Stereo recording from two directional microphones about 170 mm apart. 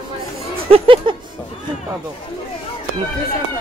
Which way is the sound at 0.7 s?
30° right (ahead or behind).